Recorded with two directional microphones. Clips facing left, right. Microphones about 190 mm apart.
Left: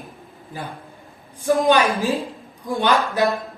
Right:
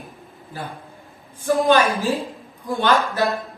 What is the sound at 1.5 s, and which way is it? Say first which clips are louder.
Speech: right 1 dB; 15° left (ahead or behind).